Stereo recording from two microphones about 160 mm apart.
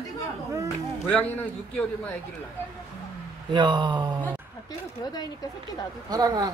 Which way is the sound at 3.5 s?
30° right (ahead or behind).